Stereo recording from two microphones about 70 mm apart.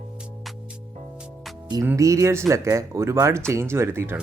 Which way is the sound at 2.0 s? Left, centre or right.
Right.